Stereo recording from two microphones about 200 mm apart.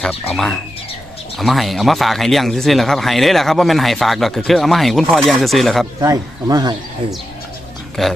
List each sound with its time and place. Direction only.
0.0 s speech: centre (ahead or behind)
6.0 s speech: 15° right (ahead or behind)
8.0 s speech: centre (ahead or behind)